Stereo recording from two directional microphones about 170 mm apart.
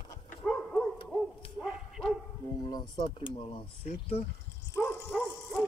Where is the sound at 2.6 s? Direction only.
25° left (ahead or behind).